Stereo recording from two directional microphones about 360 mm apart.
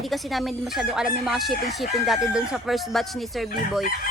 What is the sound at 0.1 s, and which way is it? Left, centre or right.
A woman's voice, centre.